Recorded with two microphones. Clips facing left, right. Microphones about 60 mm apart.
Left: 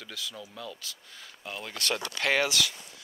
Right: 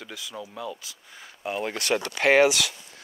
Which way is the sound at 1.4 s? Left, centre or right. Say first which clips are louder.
Right 7 dB; right.